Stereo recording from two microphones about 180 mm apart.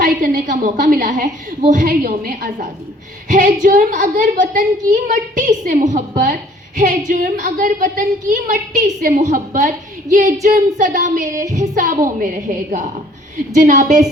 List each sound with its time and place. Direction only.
0.0 s a woman's voice: 50° right (ahead or behind)